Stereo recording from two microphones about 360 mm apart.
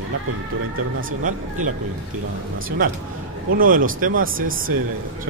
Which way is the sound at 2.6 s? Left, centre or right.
Right.